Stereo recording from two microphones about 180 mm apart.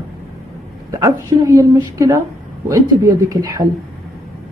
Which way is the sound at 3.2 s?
20° right (ahead or behind).